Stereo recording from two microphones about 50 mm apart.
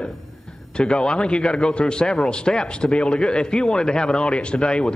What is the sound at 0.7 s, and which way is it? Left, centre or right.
A man's voice, centre.